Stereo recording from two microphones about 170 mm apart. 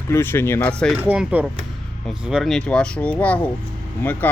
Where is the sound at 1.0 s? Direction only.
5° right (ahead or behind).